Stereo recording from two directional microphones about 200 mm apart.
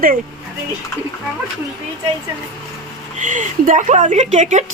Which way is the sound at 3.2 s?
40° right (ahead or behind).